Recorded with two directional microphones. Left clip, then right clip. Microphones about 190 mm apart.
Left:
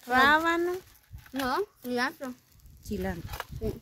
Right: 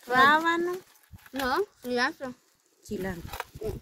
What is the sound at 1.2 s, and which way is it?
Speech, 50° right (ahead or behind).